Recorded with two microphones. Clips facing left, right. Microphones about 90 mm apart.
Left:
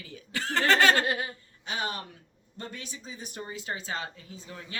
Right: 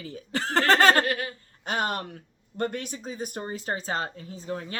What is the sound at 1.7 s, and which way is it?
Speech, 55° right (ahead or behind).